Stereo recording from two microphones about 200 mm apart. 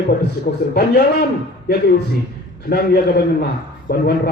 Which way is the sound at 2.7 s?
55° left (ahead or behind).